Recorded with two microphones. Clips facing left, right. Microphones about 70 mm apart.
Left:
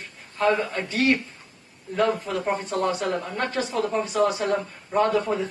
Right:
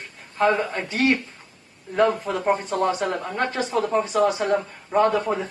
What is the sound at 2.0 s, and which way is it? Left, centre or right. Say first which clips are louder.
Speech: right 3 dB; centre.